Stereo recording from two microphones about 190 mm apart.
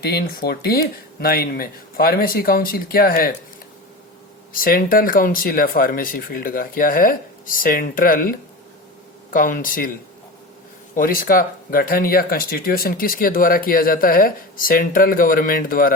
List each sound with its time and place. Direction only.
0.0 s speech: 55° left (ahead or behind)
4.5 s speech: 50° left (ahead or behind)
10.9 s speech: 45° left (ahead or behind)